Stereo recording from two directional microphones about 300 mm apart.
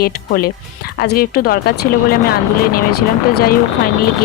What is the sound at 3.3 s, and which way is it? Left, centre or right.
Speech, left.